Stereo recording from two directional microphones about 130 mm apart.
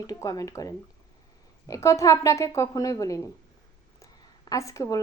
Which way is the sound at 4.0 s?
25° left (ahead or behind).